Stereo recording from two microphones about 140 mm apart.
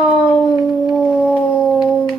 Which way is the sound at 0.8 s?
5° right (ahead or behind).